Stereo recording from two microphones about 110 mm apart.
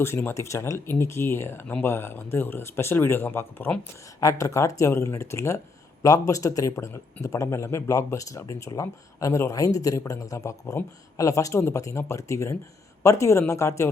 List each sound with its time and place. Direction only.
0.0 s speech: 25° left (ahead or behind)
4.2 s speech: 30° left (ahead or behind)